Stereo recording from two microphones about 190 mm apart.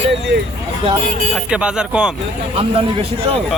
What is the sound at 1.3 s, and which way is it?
Speech, 5° right (ahead or behind).